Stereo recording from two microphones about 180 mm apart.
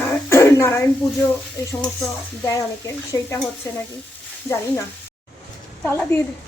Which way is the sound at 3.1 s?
15° left (ahead or behind).